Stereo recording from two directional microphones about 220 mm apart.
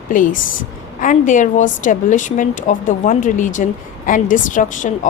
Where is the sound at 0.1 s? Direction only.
35° left (ahead or behind).